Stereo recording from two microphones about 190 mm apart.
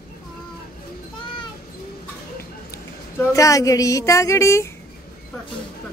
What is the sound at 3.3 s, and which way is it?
A woman's voice, 15° left (ahead or behind).